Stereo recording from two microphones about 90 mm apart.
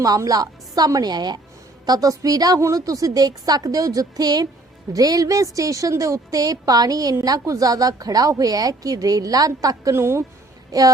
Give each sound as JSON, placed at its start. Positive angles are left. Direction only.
{"t": 0.0, "sound": "a woman's voice", "side_deg": -45}
{"t": 1.9, "sound": "a woman's voice", "side_deg": -40}
{"t": 10.7, "sound": "music", "side_deg": -40}